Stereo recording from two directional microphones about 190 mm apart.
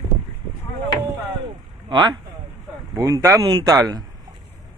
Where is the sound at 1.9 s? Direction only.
25° right (ahead or behind).